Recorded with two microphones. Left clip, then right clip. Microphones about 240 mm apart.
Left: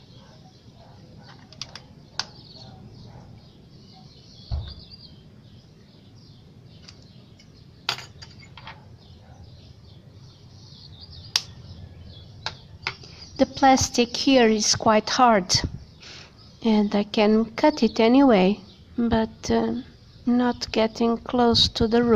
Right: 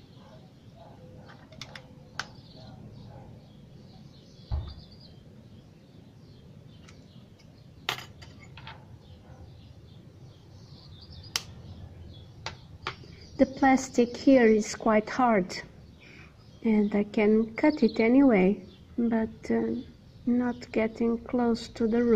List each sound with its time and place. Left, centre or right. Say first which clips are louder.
13.4 s a woman's voice: left 5 dB; centre
16.6 s a woman's voice: left 4 dB; left